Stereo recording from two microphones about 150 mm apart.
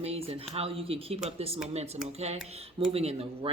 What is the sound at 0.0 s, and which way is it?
Speech, 40° right (ahead or behind).